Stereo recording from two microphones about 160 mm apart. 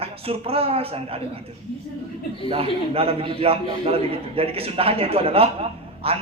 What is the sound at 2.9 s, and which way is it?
A man's voice, 35° right (ahead or behind).